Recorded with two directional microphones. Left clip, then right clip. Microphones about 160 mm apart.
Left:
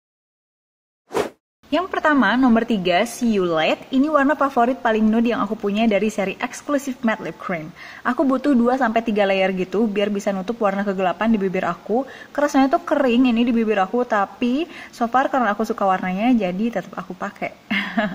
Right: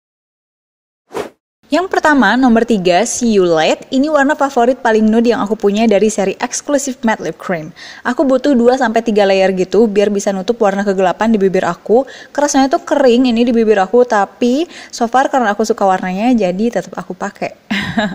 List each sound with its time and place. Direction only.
1.1 s whoosh: centre (ahead or behind)
1.7 s a woman's voice: 50° right (ahead or behind)
8.1 s a woman's voice: 30° right (ahead or behind)